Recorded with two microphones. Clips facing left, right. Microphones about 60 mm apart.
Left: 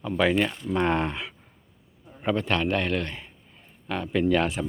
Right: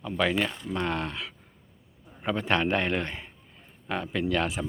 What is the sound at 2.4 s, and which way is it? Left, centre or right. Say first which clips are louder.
Speech: right 4 dB; centre.